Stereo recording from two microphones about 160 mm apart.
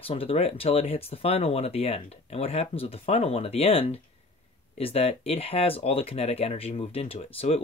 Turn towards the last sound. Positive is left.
turn(degrees=40)  # may be behind; listen again after turning